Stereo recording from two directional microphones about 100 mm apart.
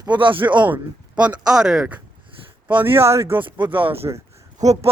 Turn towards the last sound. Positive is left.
turn(degrees=-30)  # may be behind; listen again after turning